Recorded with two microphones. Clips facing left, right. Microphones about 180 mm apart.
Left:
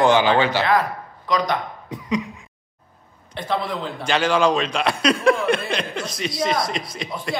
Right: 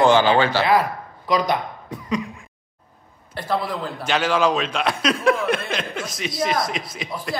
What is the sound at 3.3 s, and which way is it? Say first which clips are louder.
A man's voice: even; 5° right (ahead or behind).